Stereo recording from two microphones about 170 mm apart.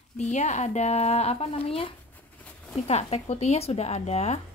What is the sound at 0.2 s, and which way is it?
A woman's voice, 45° left (ahead or behind).